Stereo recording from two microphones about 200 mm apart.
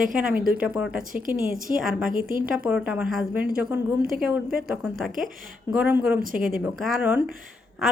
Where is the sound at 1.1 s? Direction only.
45° right (ahead or behind).